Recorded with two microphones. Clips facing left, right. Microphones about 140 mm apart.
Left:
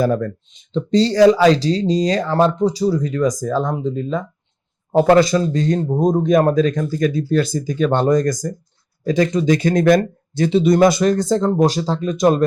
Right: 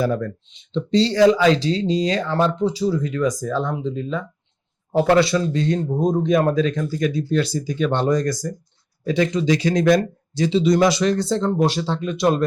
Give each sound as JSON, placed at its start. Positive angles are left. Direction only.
{"t": 0.0, "sound": "speech", "side_deg": 45}